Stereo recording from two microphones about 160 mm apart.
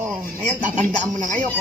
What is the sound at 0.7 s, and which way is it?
Speech, 50° right (ahead or behind).